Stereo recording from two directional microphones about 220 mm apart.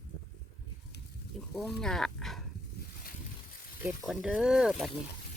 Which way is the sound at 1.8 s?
5° left (ahead or behind).